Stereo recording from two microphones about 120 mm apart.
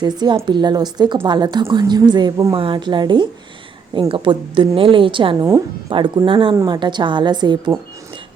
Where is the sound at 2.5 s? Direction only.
45° right (ahead or behind).